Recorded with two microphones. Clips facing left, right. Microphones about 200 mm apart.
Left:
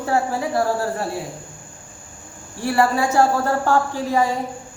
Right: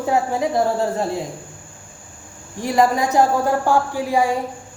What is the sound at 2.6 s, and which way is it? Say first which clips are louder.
A woman's voice: right 1 dB; 15° right (ahead or behind).